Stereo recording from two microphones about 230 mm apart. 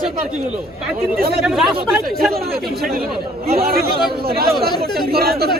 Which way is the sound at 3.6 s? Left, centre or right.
Right.